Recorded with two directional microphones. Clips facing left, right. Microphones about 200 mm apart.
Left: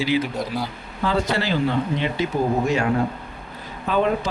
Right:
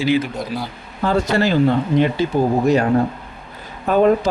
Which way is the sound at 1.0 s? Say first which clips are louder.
Right 5 dB; 45° right (ahead or behind).